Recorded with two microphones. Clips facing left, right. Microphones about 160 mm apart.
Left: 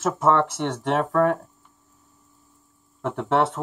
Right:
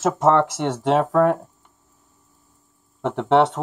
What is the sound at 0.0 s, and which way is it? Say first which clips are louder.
Speech: right 3 dB; 90° right.